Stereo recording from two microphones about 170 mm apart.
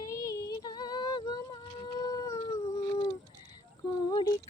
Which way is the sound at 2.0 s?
20° left (ahead or behind).